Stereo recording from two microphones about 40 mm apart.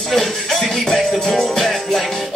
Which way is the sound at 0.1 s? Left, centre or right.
Centre.